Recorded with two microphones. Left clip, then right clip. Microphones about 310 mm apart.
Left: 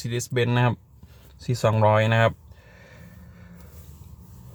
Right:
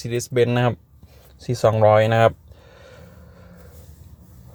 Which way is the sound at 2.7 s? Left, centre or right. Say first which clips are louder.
Right 4 dB; centre.